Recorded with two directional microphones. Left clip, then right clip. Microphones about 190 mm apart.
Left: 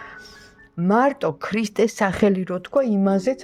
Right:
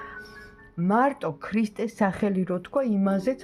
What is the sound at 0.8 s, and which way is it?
Speech, 35° left (ahead or behind).